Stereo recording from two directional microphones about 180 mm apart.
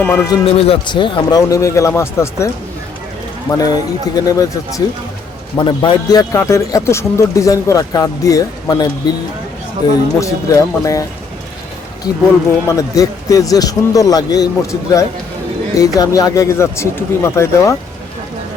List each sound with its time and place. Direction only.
0.0 s a man's voice: 10° left (ahead or behind)
3.5 s a man's voice: 20° left (ahead or behind)
5.5 s a man's voice: 25° left (ahead or behind)
10.2 s speech: 15° left (ahead or behind)
12.6 s a man's voice: 20° left (ahead or behind)